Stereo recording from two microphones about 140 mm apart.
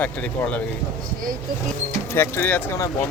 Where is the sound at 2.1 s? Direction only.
15° left (ahead or behind).